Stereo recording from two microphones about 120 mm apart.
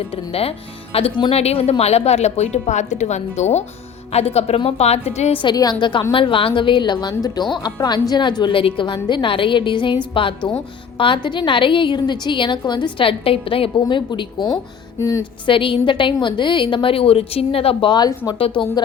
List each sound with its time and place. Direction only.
0.1 s a woman's voice: 55° left (ahead or behind)
1.4 s a woman's voice: 60° left (ahead or behind)
5.3 s a woman's voice: 45° left (ahead or behind)
14.3 s speech: centre (ahead or behind)
14.9 s speech: 25° left (ahead or behind)
15.4 s a woman's voice: 45° left (ahead or behind)